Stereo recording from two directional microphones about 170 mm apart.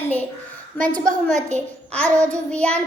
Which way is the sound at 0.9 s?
50° right (ahead or behind).